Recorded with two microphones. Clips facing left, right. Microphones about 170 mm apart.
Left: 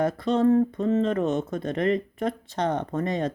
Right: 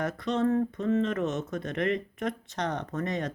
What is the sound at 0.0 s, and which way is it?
Speech, 30° left (ahead or behind).